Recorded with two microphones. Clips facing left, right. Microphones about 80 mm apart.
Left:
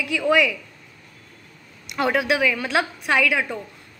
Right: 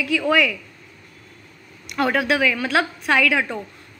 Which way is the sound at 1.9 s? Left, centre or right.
Centre.